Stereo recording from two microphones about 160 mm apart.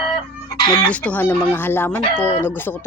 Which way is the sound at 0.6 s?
30° left (ahead or behind).